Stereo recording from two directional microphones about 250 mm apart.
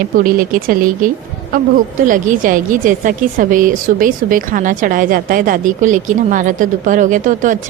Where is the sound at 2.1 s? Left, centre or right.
Right.